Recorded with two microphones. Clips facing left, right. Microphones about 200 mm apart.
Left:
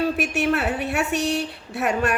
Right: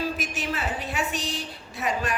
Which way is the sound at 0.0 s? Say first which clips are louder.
Left 8 dB; 65° left (ahead or behind).